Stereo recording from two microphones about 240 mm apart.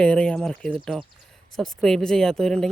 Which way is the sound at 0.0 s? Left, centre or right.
Centre.